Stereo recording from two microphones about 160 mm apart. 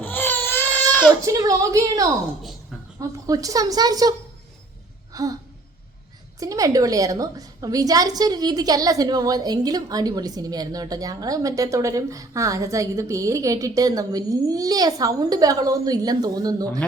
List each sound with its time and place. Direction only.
0.0 s baby cry: 10° left (ahead or behind)
1.2 s a woman's voice: 20° right (ahead or behind)
5.1 s a sound: 20° right (ahead or behind)
6.4 s a woman's voice: 20° right (ahead or behind)